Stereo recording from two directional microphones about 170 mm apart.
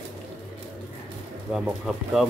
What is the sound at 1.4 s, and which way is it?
Speech, 5° right (ahead or behind).